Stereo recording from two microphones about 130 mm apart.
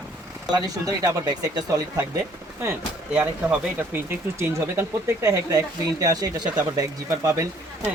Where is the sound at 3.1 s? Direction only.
10° right (ahead or behind).